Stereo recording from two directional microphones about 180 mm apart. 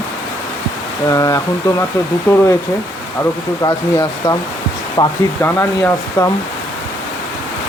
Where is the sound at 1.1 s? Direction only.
20° left (ahead or behind).